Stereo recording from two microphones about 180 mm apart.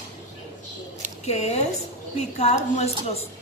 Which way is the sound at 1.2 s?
35° left (ahead or behind).